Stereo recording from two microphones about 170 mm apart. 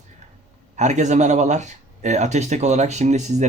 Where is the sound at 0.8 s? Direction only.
45° right (ahead or behind).